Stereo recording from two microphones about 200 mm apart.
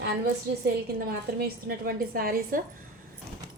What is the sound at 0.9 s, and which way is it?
A woman's voice, 50° right (ahead or behind).